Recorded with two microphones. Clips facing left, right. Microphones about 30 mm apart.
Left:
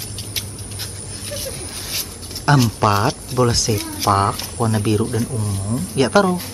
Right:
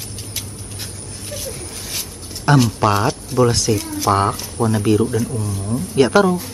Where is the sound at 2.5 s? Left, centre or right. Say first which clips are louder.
Right 1 dB; centre.